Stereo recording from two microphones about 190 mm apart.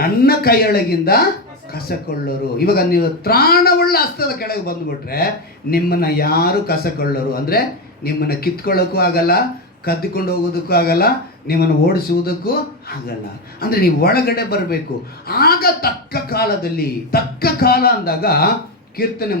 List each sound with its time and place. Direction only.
0.0 s a man's voice: 55° left (ahead or behind)
13.6 s a man's voice: 50° left (ahead or behind)